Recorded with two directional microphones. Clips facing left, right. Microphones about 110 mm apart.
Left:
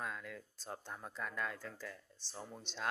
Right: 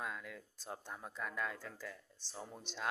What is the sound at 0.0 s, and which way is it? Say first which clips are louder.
Speech: even; 5° right (ahead or behind).